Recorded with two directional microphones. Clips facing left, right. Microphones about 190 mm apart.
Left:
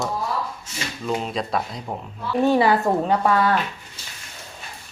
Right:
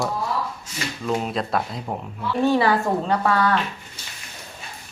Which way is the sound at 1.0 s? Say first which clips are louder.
Right 1 dB; centre (ahead or behind).